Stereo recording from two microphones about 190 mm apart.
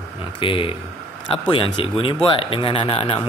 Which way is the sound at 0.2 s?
25° left (ahead or behind).